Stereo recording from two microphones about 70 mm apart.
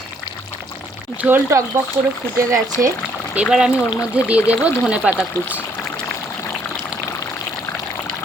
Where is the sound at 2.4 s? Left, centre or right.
Right.